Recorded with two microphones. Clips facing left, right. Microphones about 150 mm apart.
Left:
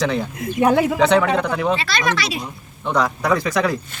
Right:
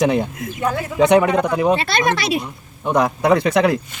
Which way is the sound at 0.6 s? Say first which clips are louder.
Left 7 dB; 70° left (ahead or behind).